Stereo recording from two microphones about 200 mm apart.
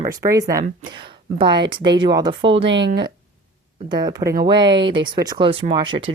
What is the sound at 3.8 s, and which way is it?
Speech, 20° right (ahead or behind).